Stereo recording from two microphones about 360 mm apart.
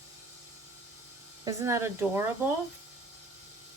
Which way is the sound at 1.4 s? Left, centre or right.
Centre.